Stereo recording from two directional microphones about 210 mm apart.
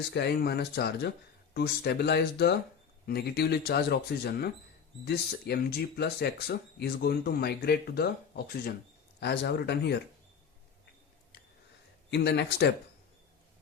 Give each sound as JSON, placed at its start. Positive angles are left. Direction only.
{"t": 0.1, "sound": "speech", "side_deg": 50}
{"t": 9.2, "sound": "speech", "side_deg": 50}
{"t": 12.1, "sound": "speech", "side_deg": 55}